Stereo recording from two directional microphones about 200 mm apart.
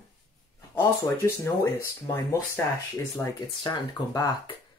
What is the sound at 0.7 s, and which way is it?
Speech, 10° left (ahead or behind).